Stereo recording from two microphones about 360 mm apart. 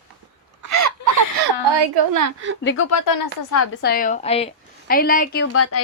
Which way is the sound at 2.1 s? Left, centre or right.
Right.